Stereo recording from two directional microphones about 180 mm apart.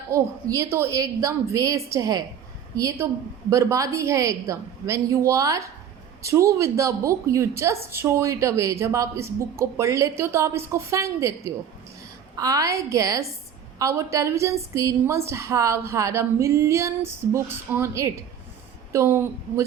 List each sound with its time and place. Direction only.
0.1 s a woman's voice: 15° right (ahead or behind)